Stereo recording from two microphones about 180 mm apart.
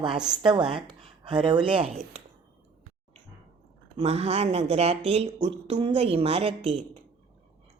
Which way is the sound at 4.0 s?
35° right (ahead or behind).